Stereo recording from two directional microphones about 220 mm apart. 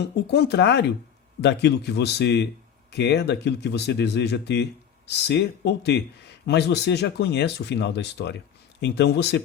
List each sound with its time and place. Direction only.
0.0 s speech: 50° left (ahead or behind)